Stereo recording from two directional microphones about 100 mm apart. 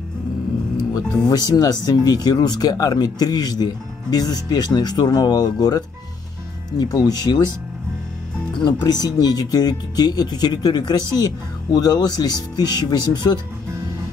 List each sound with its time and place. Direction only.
0.9 s speech: 40° left (ahead or behind)
8.5 s speech: 45° left (ahead or behind)